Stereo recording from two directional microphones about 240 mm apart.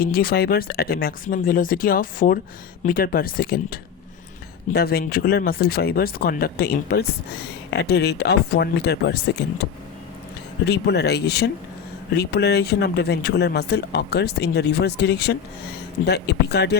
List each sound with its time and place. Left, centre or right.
0.0 s speech: left
10.7 s speech: left